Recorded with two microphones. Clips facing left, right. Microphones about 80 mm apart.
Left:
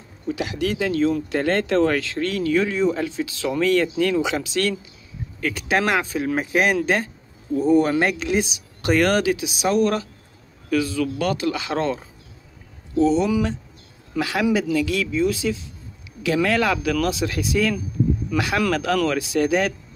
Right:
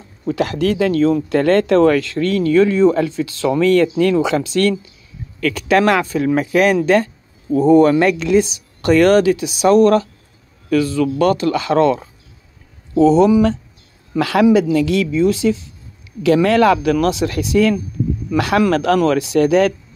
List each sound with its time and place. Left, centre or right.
0.3 s speech: right
12.9 s speech: right
14.1 s speech: right
15.0 s speech: right
16.4 s speech: right
16.9 s speech: right